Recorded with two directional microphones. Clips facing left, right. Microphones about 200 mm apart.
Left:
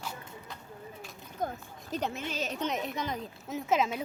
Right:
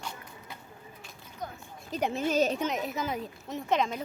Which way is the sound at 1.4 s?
50° left (ahead or behind).